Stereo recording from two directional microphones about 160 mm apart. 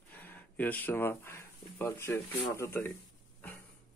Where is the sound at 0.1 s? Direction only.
10° left (ahead or behind).